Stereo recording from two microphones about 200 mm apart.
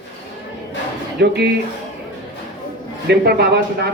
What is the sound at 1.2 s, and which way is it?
Speech, 55° right (ahead or behind).